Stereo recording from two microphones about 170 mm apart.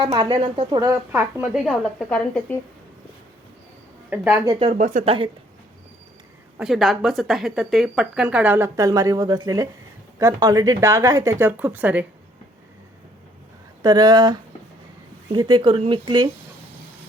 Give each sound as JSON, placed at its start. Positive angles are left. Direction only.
{"t": 0.0, "sound": "a woman's voice", "side_deg": -25}
{"t": 0.7, "sound": "speech", "side_deg": -20}
{"t": 1.1, "sound": "speech", "side_deg": -5}
{"t": 4.1, "sound": "speech", "side_deg": -10}
{"t": 4.6, "sound": "speech", "side_deg": -45}
{"t": 5.0, "sound": "a woman's voice", "side_deg": -30}
{"t": 6.6, "sound": "speech", "side_deg": 0}
{"t": 13.8, "sound": "speech", "side_deg": -25}